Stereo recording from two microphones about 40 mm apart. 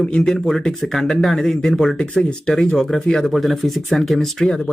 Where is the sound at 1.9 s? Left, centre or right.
Left.